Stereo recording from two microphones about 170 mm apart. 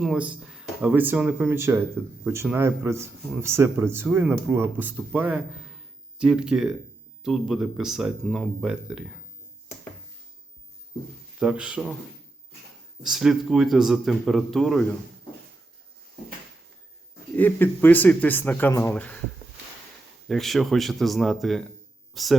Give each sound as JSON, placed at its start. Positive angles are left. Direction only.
{"t": 0.0, "sound": "speech", "side_deg": -5}
{"t": 11.3, "sound": "speech", "side_deg": -5}
{"t": 13.0, "sound": "speech", "side_deg": 0}
{"t": 17.3, "sound": "speech", "side_deg": 10}
{"t": 20.2, "sound": "speech", "side_deg": 0}